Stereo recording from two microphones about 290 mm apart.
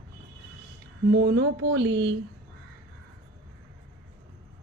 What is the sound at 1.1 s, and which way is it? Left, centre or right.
A woman's voice, right.